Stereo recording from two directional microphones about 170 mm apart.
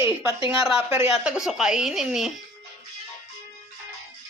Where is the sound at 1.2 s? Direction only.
5° right (ahead or behind).